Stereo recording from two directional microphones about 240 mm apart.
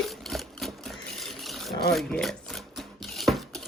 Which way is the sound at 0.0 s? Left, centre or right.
Centre.